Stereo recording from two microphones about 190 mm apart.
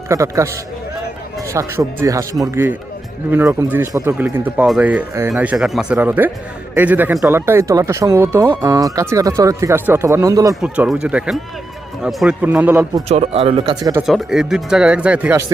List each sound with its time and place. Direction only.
0.1 s speech: 15° right (ahead or behind)
10.5 s speech: 5° right (ahead or behind)
13.1 s speech: 35° right (ahead or behind)
14.1 s speech: centre (ahead or behind)